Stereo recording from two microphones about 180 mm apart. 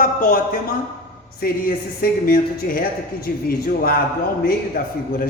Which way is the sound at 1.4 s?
55° left (ahead or behind).